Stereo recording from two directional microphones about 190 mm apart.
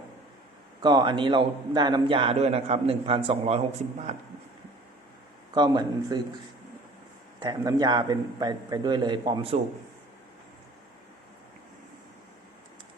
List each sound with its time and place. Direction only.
0.8 s a man's voice: 25° right (ahead or behind)
5.5 s a man's voice: 25° right (ahead or behind)
7.3 s a man's voice: 20° right (ahead or behind)